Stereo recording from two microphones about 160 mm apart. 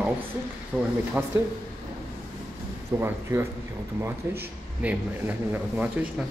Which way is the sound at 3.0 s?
15° right (ahead or behind).